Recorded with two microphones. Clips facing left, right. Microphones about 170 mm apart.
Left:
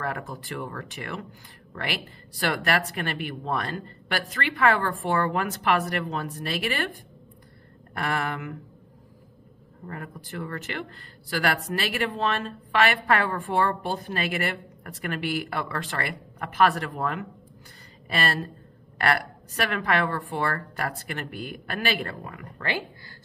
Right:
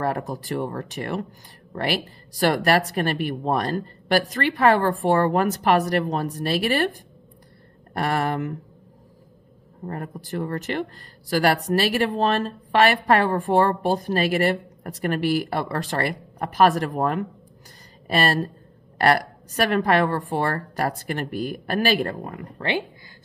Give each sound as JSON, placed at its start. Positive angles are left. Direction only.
{"t": 0.0, "sound": "speech", "side_deg": -40}
{"t": 9.8, "sound": "speech", "side_deg": -40}